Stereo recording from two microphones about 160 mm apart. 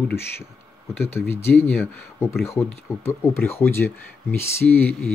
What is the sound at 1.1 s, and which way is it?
Speech, 15° left (ahead or behind).